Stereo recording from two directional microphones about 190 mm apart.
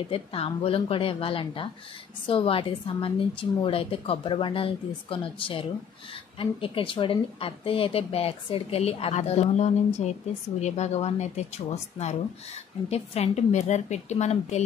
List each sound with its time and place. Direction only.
0.1 s a woman's voice: 30° left (ahead or behind)